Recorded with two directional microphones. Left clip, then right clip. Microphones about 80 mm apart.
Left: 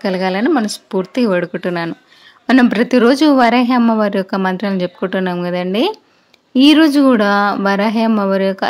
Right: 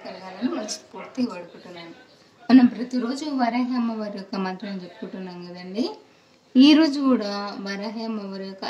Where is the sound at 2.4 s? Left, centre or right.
Left.